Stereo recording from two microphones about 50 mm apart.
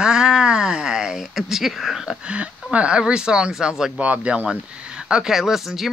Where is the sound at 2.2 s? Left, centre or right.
Right.